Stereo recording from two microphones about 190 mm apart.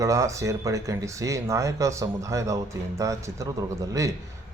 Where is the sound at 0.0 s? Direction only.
15° right (ahead or behind).